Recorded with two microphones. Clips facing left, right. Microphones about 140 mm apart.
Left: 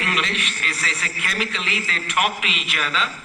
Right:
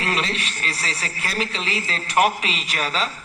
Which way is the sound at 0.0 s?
35° right (ahead or behind).